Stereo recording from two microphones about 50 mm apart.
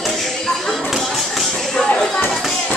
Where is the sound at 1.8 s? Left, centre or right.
Centre.